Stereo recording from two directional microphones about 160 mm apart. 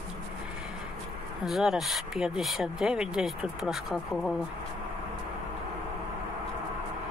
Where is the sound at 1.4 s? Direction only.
Centre (ahead or behind).